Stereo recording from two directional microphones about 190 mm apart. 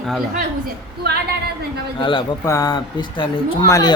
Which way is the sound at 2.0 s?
25° left (ahead or behind).